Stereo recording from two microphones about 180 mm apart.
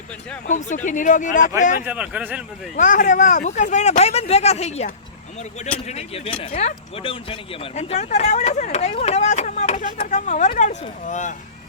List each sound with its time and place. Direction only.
0.4 s speech: 45° left (ahead or behind)
1.8 s speech: 5° right (ahead or behind)
2.7 s speech: 45° left (ahead or behind)
5.9 s speech: 35° left (ahead or behind)